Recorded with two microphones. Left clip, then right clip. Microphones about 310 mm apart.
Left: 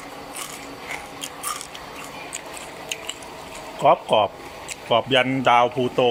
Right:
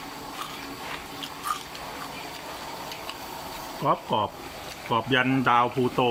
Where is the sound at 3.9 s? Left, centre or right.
Centre.